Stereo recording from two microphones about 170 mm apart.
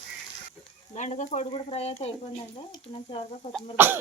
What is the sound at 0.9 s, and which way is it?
Frying, 45° left (ahead or behind).